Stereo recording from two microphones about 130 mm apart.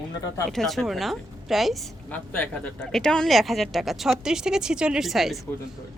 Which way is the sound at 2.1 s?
10° left (ahead or behind).